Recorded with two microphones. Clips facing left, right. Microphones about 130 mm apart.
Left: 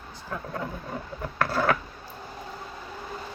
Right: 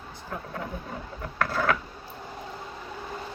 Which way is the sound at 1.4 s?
30° left (ahead or behind).